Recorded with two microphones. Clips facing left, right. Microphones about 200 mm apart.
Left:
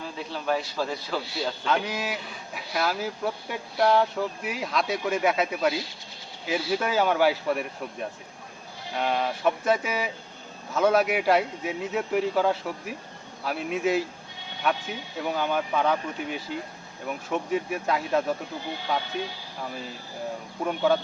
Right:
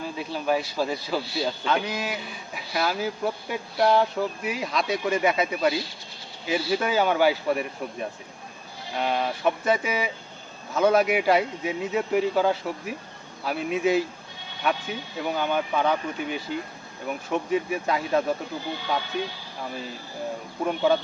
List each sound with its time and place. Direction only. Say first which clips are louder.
0.2 s a man's voice: right 2 dB; 10° right (ahead or behind)
20.7 s speech: right 1 dB; 5° right (ahead or behind)